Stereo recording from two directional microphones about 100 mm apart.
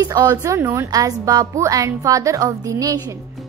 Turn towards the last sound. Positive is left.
turn(degrees=-40)  # may be behind; listen again after turning